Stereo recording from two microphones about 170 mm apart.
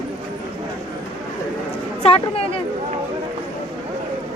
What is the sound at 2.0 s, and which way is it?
Speech, 35° left (ahead or behind).